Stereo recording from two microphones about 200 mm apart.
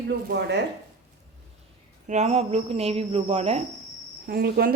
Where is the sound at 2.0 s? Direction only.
35° right (ahead or behind).